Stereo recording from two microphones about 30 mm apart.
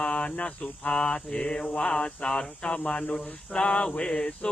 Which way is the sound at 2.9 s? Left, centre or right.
Left.